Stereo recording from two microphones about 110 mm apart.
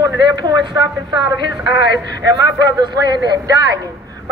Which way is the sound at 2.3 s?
40° right (ahead or behind).